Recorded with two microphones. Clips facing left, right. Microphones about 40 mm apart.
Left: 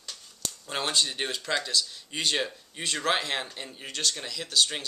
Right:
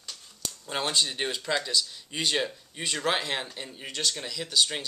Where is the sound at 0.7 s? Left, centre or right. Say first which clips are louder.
Even; centre.